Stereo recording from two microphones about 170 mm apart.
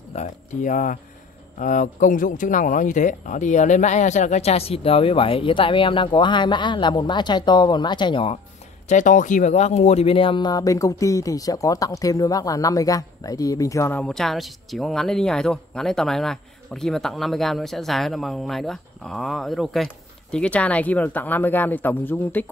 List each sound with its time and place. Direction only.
0.1 s speech: 45° left (ahead or behind)
8.8 s speech: 45° left (ahead or behind); by 13.9 s 20° left (ahead or behind)
13.9 s speech: 5° left (ahead or behind)